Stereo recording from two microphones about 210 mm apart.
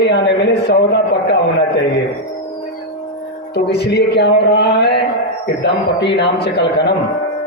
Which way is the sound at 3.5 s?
50° left (ahead or behind).